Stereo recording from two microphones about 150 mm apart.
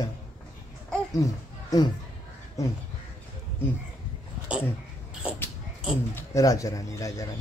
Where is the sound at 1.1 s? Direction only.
25° left (ahead or behind).